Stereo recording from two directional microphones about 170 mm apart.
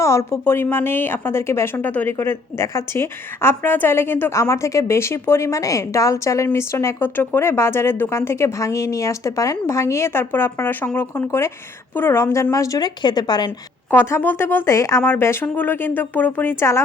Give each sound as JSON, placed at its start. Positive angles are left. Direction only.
{"t": 0.0, "sound": "a woman's voice", "side_deg": 15}
{"t": 13.9, "sound": "a woman's voice", "side_deg": 10}